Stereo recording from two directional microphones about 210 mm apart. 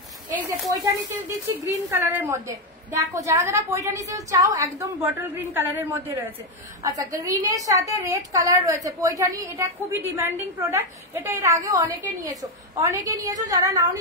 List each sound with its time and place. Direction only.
0.7 s a woman's voice: 15° right (ahead or behind)